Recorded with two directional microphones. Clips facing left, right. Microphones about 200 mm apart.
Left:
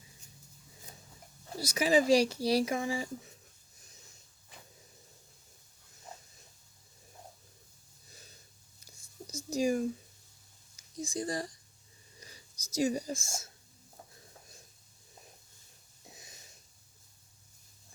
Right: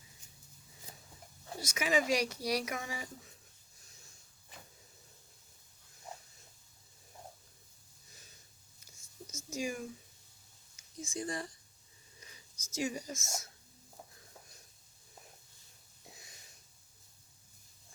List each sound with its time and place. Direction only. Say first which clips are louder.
1.5 s speech: left 5 dB; 35° left (ahead or behind)
9.2 s a sound: left 8 dB; 35° left (ahead or behind)
10.9 s speech: left 4 dB; 35° left (ahead or behind)
16.1 s wheeze: left 3 dB; 20° left (ahead or behind)